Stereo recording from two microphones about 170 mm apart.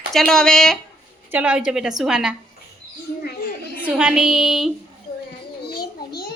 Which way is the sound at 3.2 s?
60° left (ahead or behind).